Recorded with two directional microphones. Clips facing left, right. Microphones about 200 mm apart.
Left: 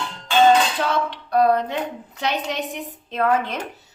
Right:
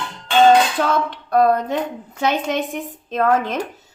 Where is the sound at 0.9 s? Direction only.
50° right (ahead or behind).